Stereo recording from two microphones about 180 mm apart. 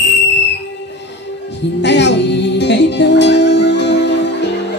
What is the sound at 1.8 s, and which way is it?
Music, 75° left (ahead or behind).